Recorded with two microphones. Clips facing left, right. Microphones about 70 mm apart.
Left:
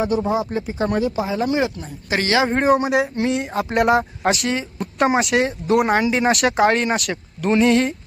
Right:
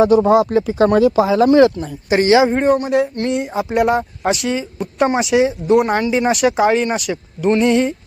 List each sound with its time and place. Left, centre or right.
0.0 s speech: right
2.0 s speech: right
2.5 s speech: centre